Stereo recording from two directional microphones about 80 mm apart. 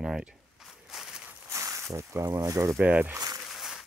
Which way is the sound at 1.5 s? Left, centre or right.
Right.